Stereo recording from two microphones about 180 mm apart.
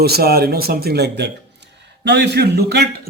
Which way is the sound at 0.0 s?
60° right (ahead or behind).